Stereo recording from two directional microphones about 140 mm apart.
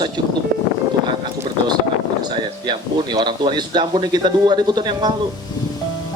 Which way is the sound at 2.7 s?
30° right (ahead or behind).